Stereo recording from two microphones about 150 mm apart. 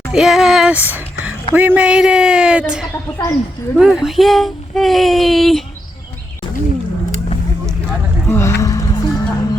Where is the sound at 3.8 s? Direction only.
Centre (ahead or behind).